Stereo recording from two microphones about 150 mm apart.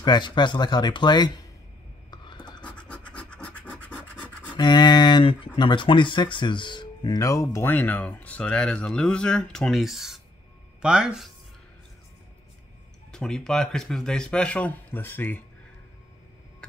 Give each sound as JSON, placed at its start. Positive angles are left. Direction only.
{"t": 0.0, "sound": "speech", "side_deg": 30}
{"t": 2.0, "sound": "writing", "side_deg": 30}
{"t": 2.6, "sound": "scratch", "side_deg": 10}
{"t": 4.6, "sound": "speech", "side_deg": 30}
{"t": 13.1, "sound": "speech", "side_deg": 5}